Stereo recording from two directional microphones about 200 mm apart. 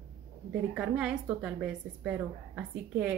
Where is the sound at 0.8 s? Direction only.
5° right (ahead or behind).